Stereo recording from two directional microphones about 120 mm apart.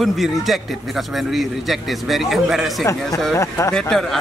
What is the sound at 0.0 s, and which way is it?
Speech, centre (ahead or behind).